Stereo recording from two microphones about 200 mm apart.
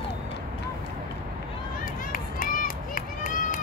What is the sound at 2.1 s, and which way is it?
Run, 45° left (ahead or behind).